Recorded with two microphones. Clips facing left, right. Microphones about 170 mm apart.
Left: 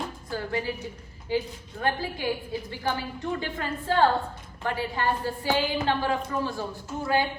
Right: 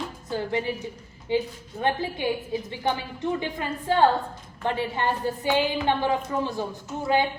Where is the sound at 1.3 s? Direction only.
25° right (ahead or behind).